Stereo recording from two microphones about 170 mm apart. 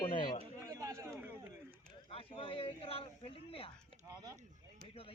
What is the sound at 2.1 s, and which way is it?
A man's voice, 35° left (ahead or behind).